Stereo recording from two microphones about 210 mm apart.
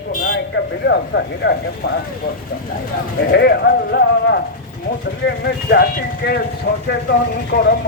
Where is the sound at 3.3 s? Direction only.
50° left (ahead or behind).